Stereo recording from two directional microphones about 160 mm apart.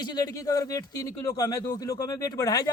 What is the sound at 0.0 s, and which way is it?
Speech, 25° left (ahead or behind).